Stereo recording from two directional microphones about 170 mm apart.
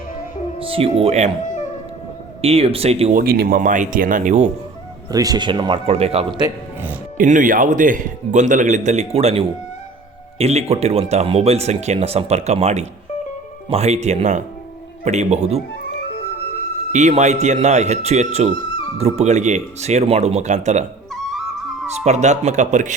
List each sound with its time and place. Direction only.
0.6 s speech: 35° right (ahead or behind)
2.4 s speech: 35° right (ahead or behind)
3.2 s a man's voice: 60° right (ahead or behind); by 4.5 s 45° right (ahead or behind)
5.1 s speech: 20° right (ahead or behind)
7.2 s a man's voice: 50° right (ahead or behind)
16.9 s speech: 45° right (ahead or behind)
21.1 s music: centre (ahead or behind)
21.8 s a man's voice: 40° right (ahead or behind)